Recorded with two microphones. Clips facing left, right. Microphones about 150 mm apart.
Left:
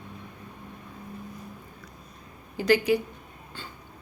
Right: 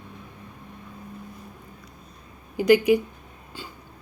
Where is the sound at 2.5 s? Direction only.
15° right (ahead or behind).